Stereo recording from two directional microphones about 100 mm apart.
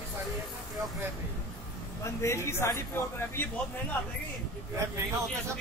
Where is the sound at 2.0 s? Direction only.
25° left (ahead or behind).